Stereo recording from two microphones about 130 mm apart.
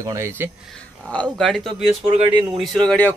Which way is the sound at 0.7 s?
10° left (ahead or behind).